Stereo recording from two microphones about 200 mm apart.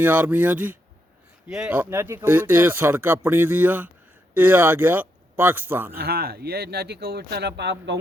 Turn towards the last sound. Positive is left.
turn(degrees=-65)  # may be behind; listen again after turning